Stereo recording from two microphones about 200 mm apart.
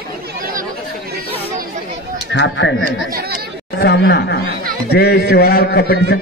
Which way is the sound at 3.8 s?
55° left (ahead or behind).